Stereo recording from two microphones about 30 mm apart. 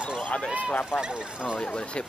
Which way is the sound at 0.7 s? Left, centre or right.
Left.